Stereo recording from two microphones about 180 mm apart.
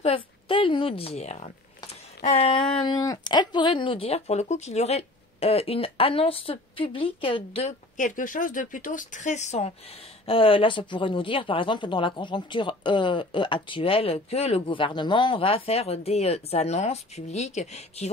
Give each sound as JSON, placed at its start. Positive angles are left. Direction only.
{"t": 0.0, "sound": "a woman's voice", "side_deg": 30}